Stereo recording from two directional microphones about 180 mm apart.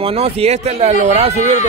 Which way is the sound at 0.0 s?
35° right (ahead or behind).